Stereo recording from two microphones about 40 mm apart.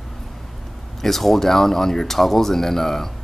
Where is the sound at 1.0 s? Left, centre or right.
Centre.